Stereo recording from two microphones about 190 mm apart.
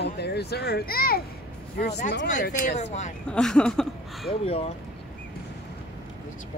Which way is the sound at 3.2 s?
5° left (ahead or behind).